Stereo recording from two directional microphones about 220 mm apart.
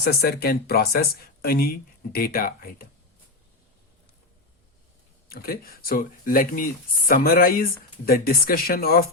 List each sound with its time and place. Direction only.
0.0 s speech: 45° left (ahead or behind)
5.3 s speech: 40° left (ahead or behind)